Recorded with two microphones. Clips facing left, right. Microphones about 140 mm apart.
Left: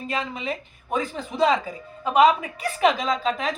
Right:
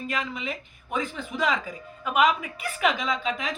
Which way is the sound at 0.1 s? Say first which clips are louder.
Left 5 dB; 35° left (ahead or behind).